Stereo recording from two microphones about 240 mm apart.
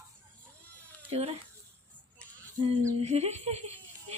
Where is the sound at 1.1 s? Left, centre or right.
Right.